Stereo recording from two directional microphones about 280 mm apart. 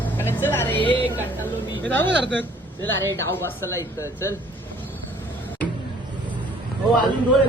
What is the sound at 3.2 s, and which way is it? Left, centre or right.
Speech, centre.